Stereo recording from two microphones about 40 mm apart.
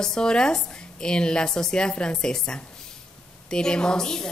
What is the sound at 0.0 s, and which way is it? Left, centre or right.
Speech, centre.